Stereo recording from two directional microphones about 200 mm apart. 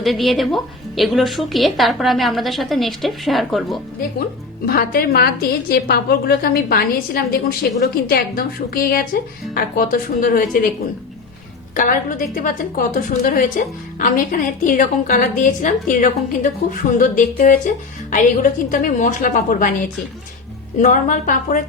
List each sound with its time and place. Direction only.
0.0 s a woman's voice: centre (ahead or behind)
4.6 s a woman's voice: 50° left (ahead or behind)
11.7 s a woman's voice: 40° left (ahead or behind)